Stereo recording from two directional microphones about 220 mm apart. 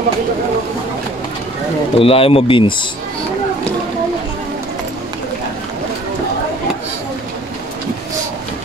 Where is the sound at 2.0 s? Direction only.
25° left (ahead or behind).